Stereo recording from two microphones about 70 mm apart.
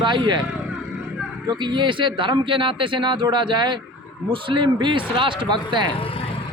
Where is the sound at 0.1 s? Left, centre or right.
Right.